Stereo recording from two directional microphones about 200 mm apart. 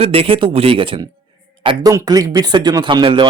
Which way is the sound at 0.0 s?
30° right (ahead or behind).